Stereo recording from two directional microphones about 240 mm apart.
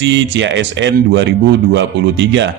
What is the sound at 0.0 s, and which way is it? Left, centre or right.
A man's voice, right.